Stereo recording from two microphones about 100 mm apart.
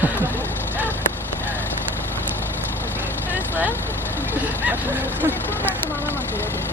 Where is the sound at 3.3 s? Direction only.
20° right (ahead or behind).